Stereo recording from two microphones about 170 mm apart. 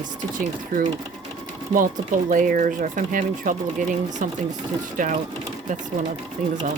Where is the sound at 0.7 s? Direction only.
50° right (ahead or behind).